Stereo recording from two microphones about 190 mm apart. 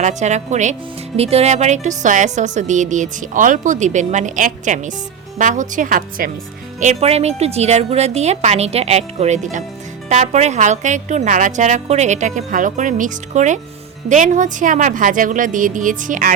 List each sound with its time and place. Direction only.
0.0 s a woman's voice: 40° right (ahead or behind)
6.7 s a woman's voice: 35° right (ahead or behind)